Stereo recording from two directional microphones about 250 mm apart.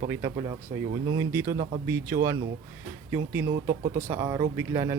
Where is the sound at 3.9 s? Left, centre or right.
Centre.